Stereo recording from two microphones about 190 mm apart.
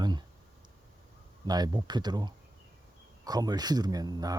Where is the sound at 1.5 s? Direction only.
20° right (ahead or behind).